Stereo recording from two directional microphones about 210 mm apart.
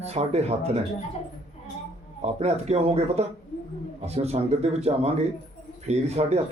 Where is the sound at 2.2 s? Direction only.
30° right (ahead or behind).